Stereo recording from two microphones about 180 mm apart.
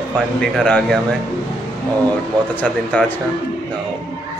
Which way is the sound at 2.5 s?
5° left (ahead or behind).